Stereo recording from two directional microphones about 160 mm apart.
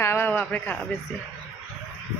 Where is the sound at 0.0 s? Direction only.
15° left (ahead or behind).